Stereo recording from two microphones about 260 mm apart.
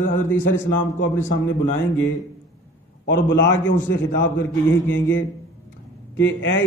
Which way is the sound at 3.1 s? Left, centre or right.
Left.